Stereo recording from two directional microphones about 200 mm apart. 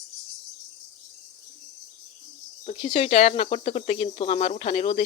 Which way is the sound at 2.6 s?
30° left (ahead or behind).